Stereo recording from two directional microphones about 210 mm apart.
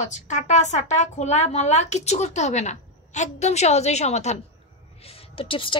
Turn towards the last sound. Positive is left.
turn(degrees=25)  # may be behind; listen again after turning